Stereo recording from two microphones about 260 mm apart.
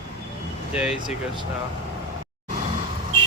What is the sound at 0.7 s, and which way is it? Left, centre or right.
Speech, centre.